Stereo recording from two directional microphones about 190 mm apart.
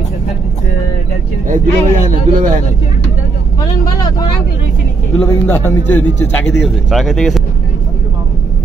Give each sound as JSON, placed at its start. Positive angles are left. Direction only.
{"t": 1.5, "sound": "a man's voice", "side_deg": -40}
{"t": 3.6, "sound": "speech", "side_deg": 20}
{"t": 5.2, "sound": "a man's voice", "side_deg": 10}